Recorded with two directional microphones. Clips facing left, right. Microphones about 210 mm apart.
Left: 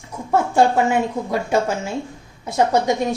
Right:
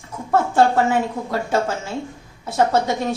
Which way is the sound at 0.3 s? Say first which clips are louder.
Even; 15° left (ahead or behind).